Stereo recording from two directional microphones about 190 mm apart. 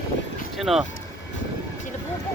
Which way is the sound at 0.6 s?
Centre (ahead or behind).